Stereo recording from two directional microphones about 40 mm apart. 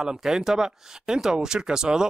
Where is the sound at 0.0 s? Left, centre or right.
Centre.